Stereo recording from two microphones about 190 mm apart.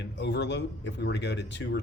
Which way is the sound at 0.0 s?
65° left (ahead or behind).